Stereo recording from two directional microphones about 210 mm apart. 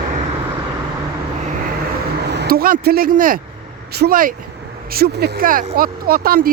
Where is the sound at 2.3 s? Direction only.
50° right (ahead or behind).